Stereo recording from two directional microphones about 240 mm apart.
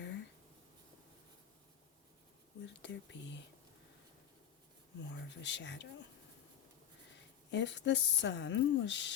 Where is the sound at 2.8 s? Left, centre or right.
Left.